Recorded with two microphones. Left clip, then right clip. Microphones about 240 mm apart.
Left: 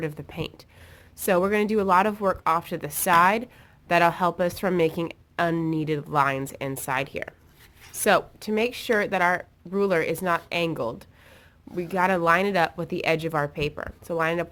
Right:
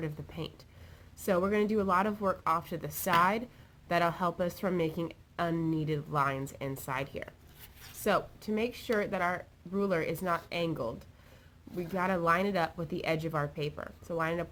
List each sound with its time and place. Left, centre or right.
0.0 s a woman's voice: left